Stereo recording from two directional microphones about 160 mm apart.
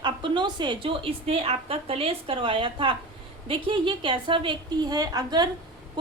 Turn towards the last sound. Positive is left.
turn(degrees=-25)  # may be behind; listen again after turning